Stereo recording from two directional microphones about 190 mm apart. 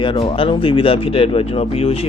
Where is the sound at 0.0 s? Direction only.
30° left (ahead or behind).